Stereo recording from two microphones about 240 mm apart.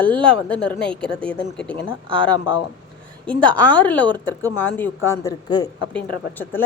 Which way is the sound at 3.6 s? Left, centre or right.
Centre.